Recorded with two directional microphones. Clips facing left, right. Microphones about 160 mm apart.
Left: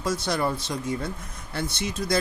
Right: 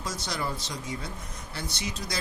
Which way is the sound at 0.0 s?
55° left (ahead or behind).